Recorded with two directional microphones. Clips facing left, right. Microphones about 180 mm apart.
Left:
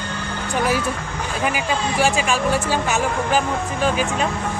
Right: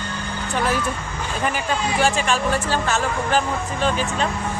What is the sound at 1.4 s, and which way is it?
Speech, 10° left (ahead or behind).